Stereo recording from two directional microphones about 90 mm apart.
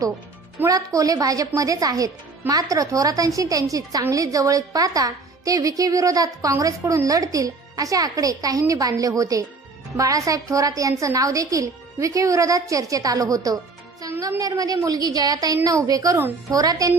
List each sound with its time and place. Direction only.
0.7 s a woman's voice: 40° right (ahead or behind)